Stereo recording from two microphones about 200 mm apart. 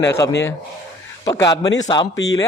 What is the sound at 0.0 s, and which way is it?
A man's voice, 15° left (ahead or behind).